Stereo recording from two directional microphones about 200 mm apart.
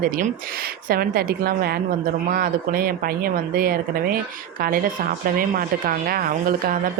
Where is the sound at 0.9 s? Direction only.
50° right (ahead or behind).